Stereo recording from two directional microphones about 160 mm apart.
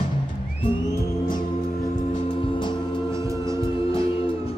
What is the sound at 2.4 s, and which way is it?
Music, 30° left (ahead or behind).